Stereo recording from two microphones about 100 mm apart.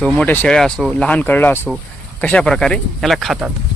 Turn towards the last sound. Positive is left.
turn(degrees=0)  # may be behind; listen again after turning